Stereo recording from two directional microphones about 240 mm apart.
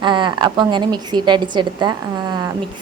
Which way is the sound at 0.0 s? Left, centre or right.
Centre.